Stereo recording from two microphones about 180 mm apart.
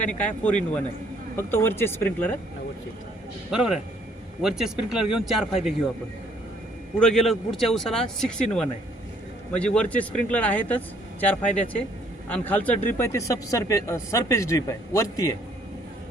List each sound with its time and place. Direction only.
0.0 s speech: 5° left (ahead or behind)
3.5 s speech: 5° right (ahead or behind)
7.0 s speech: centre (ahead or behind); by 15.4 s 20° left (ahead or behind)